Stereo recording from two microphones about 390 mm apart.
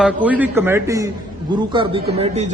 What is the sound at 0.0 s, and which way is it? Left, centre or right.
A man's voice, centre.